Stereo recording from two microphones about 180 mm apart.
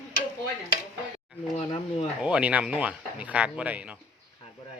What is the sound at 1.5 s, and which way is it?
Speech, 35° left (ahead or behind).